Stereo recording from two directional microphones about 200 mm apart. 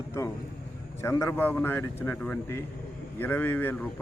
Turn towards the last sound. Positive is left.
turn(degrees=10)  # may be behind; listen again after turning